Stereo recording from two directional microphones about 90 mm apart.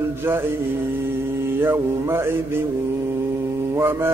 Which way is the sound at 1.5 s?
25° right (ahead or behind).